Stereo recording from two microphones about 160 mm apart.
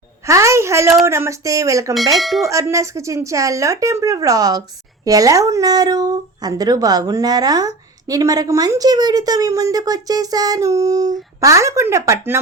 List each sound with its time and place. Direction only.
0.3 s speech: 20° right (ahead or behind)
2.1 s speech: centre (ahead or behind)
2.4 s speech: 20° right (ahead or behind)